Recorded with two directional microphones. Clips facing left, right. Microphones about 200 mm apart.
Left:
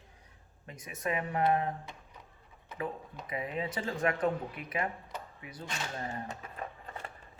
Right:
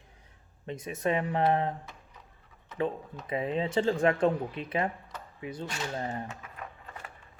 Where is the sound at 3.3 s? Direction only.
30° right (ahead or behind).